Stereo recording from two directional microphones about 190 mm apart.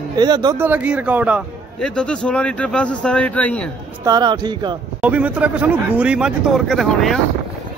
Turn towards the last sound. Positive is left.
turn(degrees=0)  # may be behind; listen again after turning